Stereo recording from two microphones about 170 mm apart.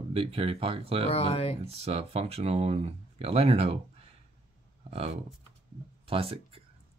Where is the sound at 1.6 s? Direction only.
35° right (ahead or behind).